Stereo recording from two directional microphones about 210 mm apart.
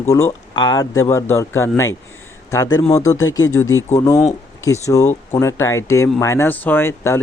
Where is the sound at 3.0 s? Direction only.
15° left (ahead or behind).